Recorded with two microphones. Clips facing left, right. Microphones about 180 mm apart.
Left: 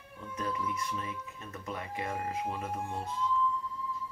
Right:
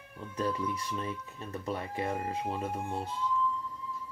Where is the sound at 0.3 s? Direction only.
35° right (ahead or behind).